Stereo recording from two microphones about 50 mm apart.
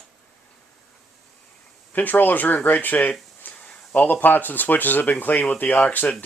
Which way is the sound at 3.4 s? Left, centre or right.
Left.